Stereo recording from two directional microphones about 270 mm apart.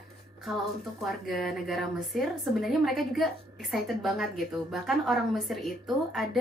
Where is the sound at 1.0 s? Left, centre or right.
Centre.